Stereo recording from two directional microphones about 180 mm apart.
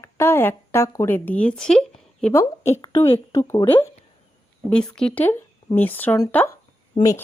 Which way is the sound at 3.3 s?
15° left (ahead or behind).